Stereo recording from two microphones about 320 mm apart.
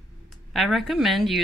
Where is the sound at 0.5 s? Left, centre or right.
Centre.